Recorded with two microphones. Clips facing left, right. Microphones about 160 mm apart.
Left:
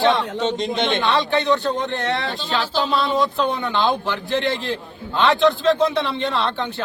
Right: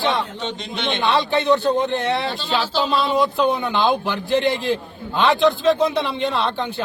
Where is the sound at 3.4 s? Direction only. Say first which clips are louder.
Right 3 dB; 25° right (ahead or behind).